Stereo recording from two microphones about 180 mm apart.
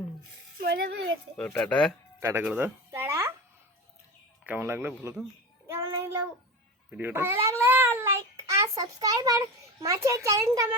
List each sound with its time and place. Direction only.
0.6 s a child's voice: 60° right (ahead or behind)
1.4 s speech: 5° left (ahead or behind)
2.2 s a sound: 10° right (ahead or behind)
4.4 s a child's voice: 10° right (ahead or behind)
5.6 s child singing: 15° right (ahead or behind)
6.9 s a child's voice: 10° right (ahead or behind)
7.6 s a sound: 15° right (ahead or behind)
9.8 s a child's voice: 15° right (ahead or behind)